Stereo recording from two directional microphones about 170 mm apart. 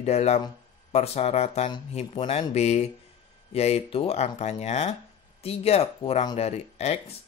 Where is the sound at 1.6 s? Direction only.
30° left (ahead or behind).